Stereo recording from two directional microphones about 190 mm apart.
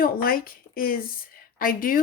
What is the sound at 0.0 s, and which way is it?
Speech, 50° left (ahead or behind).